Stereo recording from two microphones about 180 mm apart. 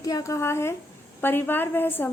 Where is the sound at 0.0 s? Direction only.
20° left (ahead or behind).